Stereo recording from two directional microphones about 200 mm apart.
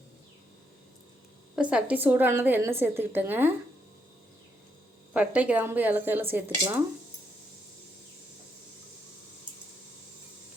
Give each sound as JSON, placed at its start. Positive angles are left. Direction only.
{"t": 1.5, "sound": "a woman's voice", "side_deg": -5}
{"t": 5.1, "sound": "a woman's voice", "side_deg": -5}